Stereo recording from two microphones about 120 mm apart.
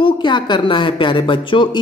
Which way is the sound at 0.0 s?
40° left (ahead or behind).